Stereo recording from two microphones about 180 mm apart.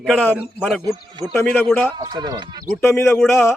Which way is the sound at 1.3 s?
5° left (ahead or behind).